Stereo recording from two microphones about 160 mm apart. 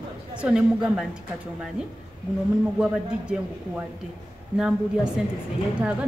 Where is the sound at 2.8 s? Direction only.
5° right (ahead or behind).